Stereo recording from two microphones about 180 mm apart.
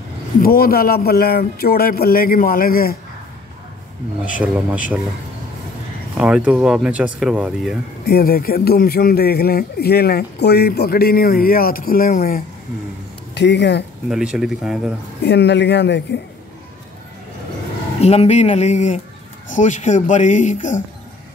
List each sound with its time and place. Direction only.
0.4 s a man's voice: 55° left (ahead or behind)
4.2 s speech: 10° right (ahead or behind)
6.1 s speech: 5° right (ahead or behind)
8.0 s a man's voice: 60° left (ahead or behind)
13.3 s speech: 70° left (ahead or behind)
14.0 s speech: 5° right (ahead or behind)
15.2 s speech: 70° left (ahead or behind)
18.0 s a sound: 35° left (ahead or behind)
19.5 s speech: 45° left (ahead or behind)